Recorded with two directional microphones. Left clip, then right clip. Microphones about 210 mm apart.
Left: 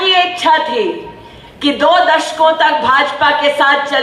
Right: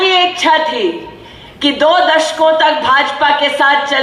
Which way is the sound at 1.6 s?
45° right (ahead or behind).